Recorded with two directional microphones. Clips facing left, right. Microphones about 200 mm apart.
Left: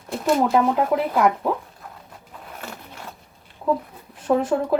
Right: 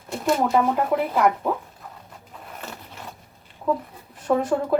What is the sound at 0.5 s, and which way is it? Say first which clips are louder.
Speech: left 2 dB; centre (ahead or behind).